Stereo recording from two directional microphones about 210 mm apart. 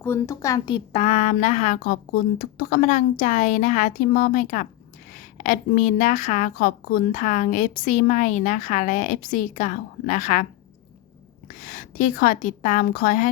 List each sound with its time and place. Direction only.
0.0 s a woman's voice: 15° left (ahead or behind); by 10.4 s 35° left (ahead or behind)
11.4 s a woman's voice: 40° left (ahead or behind)